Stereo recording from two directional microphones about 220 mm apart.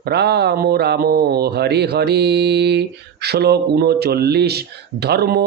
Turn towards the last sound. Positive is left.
turn(degrees=-45)  # may be behind; listen again after turning